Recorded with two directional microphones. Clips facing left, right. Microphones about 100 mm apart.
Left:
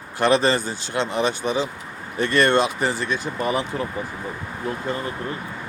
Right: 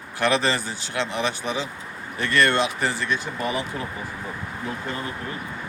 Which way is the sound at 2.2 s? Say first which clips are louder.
Left 3 dB; 20° left (ahead or behind).